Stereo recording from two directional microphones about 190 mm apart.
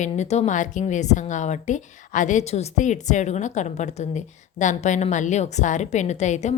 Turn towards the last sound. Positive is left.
turn(degrees=35)  # may be behind; listen again after turning